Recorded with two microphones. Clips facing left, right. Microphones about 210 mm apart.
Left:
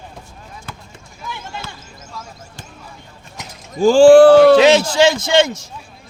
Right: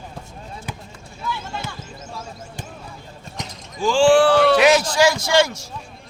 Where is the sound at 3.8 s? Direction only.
40° left (ahead or behind).